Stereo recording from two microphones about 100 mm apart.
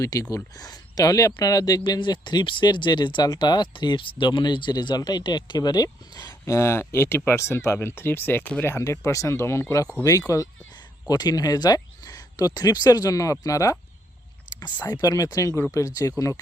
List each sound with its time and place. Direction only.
0.0 s speech: 35° left (ahead or behind)
6.4 s speech: 25° left (ahead or behind)
8.7 s speech: 30° left (ahead or behind)
14.9 s speech: 40° left (ahead or behind)